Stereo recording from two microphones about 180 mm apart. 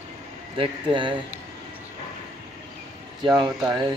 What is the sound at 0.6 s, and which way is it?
Speech, 30° right (ahead or behind).